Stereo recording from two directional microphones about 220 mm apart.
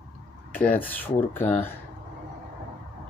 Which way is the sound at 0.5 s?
10° left (ahead or behind).